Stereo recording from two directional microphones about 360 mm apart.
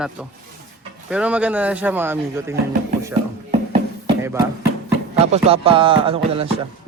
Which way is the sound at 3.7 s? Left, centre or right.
Centre.